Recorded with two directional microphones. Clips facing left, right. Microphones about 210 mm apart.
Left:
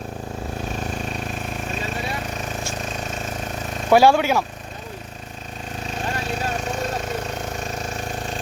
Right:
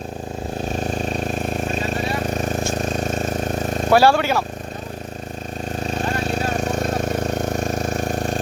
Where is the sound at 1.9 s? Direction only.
40° right (ahead or behind).